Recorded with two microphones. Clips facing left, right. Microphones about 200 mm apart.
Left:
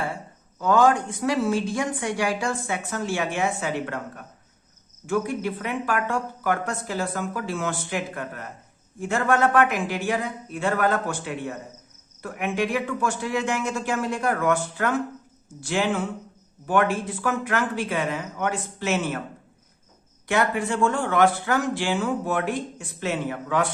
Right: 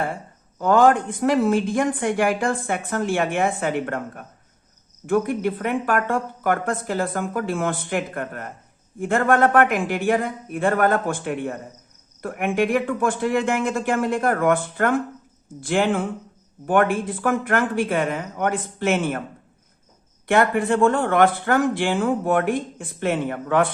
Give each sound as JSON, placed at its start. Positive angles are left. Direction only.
{"t": 0.6, "sound": "a woman's voice", "side_deg": -55}
{"t": 20.2, "sound": "speech", "side_deg": -55}